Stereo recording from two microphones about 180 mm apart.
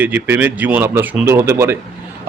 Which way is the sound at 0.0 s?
10° right (ahead or behind).